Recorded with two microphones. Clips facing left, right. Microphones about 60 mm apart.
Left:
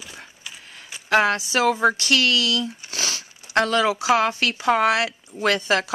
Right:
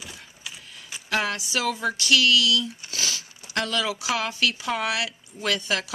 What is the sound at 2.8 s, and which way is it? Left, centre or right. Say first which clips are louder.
Crumpling: left 2 dB; left.